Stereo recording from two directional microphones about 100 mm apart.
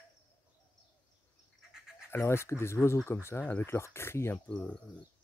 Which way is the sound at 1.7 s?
5° right (ahead or behind).